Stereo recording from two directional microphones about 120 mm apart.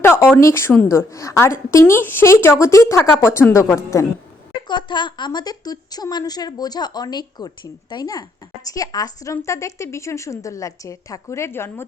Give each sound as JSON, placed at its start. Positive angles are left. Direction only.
{"t": 0.0, "sound": "a sound", "side_deg": 20}
{"t": 0.9, "sound": "a woman's voice", "side_deg": 25}
{"t": 4.7, "sound": "a woman's voice", "side_deg": 40}